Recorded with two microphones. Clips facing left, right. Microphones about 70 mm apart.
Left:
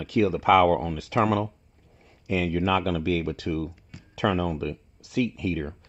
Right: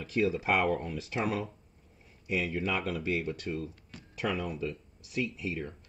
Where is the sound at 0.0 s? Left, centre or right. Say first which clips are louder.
Left 6 dB; left.